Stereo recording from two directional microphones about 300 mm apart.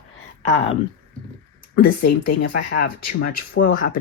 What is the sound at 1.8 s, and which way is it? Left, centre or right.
Speech, left.